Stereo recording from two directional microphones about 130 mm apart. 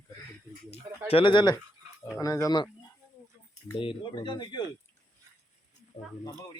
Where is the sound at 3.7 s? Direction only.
40° left (ahead or behind).